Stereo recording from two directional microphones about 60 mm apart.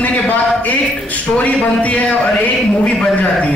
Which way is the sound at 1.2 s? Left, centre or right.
Left.